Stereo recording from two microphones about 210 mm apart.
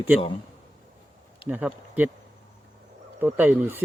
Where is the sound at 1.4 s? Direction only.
10° right (ahead or behind).